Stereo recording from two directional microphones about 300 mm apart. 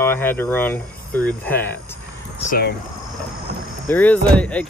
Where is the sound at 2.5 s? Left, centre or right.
Left.